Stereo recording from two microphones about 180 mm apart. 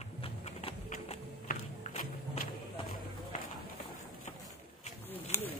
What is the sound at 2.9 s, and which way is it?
Run, 45° left (ahead or behind).